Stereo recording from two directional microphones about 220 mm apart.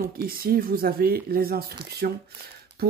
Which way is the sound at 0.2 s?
40° right (ahead or behind).